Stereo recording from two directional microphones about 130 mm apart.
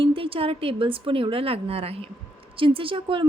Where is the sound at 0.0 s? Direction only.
45° right (ahead or behind).